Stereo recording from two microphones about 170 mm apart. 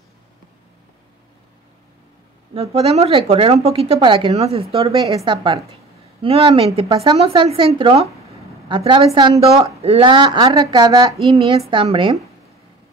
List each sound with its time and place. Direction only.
2.5 s a woman's voice: 35° right (ahead or behind)